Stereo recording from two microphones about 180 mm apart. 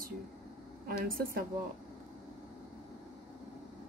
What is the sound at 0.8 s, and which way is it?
Speech, 55° right (ahead or behind).